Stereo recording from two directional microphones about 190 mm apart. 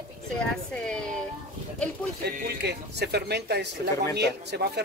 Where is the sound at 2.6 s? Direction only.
60° right (ahead or behind).